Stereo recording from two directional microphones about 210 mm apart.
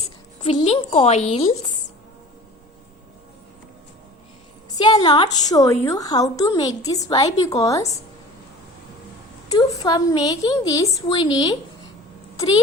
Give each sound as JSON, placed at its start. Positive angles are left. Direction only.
{"t": 0.0, "sound": "speech", "side_deg": 30}
{"t": 4.8, "sound": "a woman's voice", "side_deg": 20}
{"t": 9.6, "sound": "a woman's voice", "side_deg": 20}